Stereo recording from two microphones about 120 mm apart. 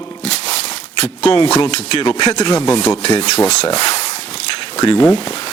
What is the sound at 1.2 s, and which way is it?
Speech, 40° left (ahead or behind).